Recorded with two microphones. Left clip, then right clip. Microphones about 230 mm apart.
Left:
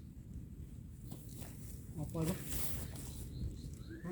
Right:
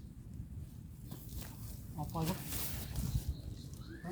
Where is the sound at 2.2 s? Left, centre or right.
Centre.